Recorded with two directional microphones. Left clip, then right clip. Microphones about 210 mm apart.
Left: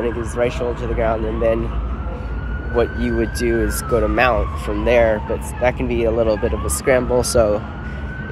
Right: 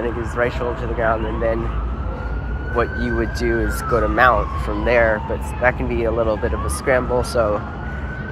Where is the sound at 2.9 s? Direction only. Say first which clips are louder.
Left 1 dB; 30° left (ahead or behind).